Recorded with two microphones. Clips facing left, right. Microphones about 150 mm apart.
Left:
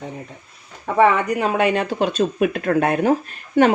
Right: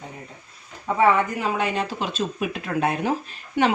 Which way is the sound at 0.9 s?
65° left (ahead or behind).